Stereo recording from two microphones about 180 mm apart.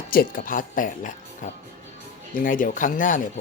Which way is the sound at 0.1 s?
50° left (ahead or behind).